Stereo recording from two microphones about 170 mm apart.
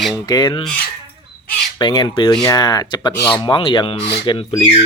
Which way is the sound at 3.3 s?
30° left (ahead or behind).